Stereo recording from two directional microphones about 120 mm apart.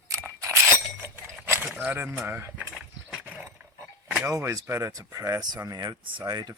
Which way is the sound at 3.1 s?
10° right (ahead or behind).